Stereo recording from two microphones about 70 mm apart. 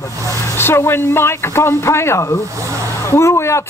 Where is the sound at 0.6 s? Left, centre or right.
Left.